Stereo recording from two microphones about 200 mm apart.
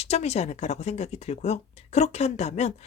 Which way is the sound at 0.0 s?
35° left (ahead or behind).